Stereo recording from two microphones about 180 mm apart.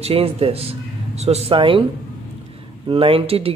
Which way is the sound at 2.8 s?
30° right (ahead or behind).